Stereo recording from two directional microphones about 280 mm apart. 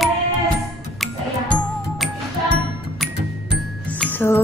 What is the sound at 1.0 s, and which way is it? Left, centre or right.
Music, centre.